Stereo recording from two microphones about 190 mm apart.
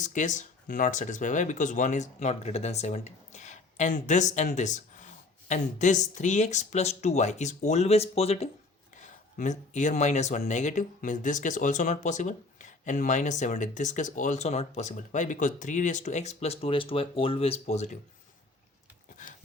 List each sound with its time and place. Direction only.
0.0 s speech: 40° left (ahead or behind)